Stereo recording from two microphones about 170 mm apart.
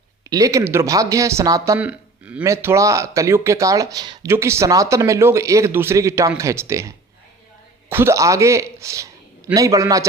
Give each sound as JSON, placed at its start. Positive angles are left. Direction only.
{"t": 0.3, "sound": "a man's voice", "side_deg": -20}